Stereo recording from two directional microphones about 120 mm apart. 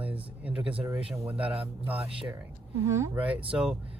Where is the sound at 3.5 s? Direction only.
10° right (ahead or behind).